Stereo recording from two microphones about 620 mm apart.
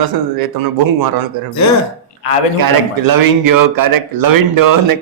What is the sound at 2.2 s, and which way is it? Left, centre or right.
Speech, left.